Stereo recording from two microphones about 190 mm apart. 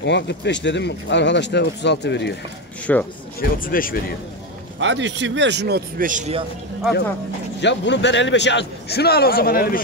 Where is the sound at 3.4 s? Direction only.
50° left (ahead or behind).